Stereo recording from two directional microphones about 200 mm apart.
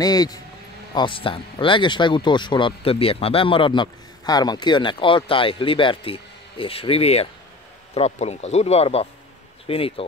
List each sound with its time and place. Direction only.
0.0 s speech: 20° left (ahead or behind)